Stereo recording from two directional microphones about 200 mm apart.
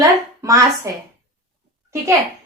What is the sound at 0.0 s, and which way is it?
A woman's voice, 15° right (ahead or behind).